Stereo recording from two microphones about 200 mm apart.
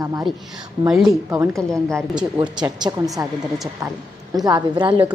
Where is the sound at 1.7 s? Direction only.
15° right (ahead or behind).